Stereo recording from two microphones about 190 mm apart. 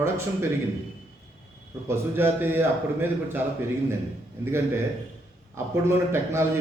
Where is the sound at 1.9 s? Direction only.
10° right (ahead or behind).